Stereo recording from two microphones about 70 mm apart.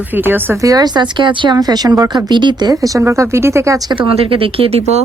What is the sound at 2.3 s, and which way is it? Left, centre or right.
Speech, right.